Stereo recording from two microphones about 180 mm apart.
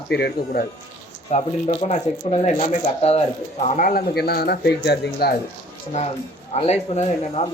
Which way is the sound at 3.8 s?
50° left (ahead or behind).